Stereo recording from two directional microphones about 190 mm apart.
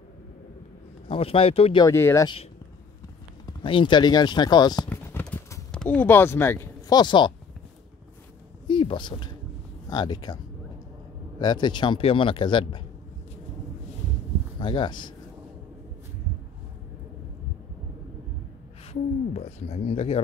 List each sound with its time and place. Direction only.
1.0 s a man's voice: 30° left (ahead or behind)
1.9 s speech: 15° left (ahead or behind)
3.4 s a man's voice: 25° left (ahead or behind)
4.8 s clip-clop: 5° left (ahead or behind); by 7.3 s 25° left (ahead or behind)
8.6 s a sound: 25° left (ahead or behind)
9.8 s a man's voice: 20° left (ahead or behind)
14.6 s speech: 25° left (ahead or behind)
19.3 s speech: 30° left (ahead or behind)